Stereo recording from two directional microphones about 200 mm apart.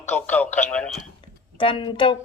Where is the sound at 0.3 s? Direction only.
10° left (ahead or behind).